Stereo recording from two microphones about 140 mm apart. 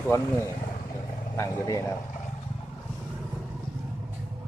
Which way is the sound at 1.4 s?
25° left (ahead or behind).